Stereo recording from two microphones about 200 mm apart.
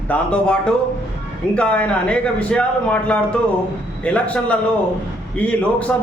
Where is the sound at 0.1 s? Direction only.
5° left (ahead or behind).